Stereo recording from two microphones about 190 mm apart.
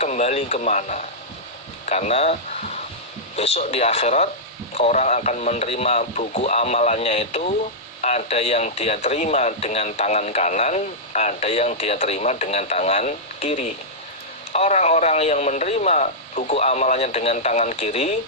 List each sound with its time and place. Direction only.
0.0 s speech: 35° left (ahead or behind)